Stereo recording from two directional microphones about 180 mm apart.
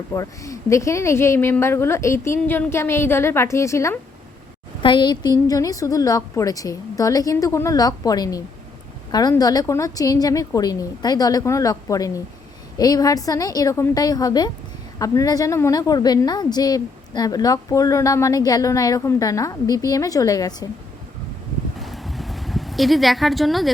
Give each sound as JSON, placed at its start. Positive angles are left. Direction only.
{"t": 0.1, "sound": "speech", "side_deg": 15}
{"t": 4.8, "sound": "a woman's voice", "side_deg": 25}
{"t": 21.8, "sound": "a sound", "side_deg": 0}